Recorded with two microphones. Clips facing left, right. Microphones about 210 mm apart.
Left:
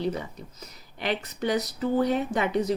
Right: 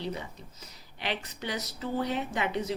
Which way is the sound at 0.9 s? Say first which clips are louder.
Left 6 dB; 45° left (ahead or behind).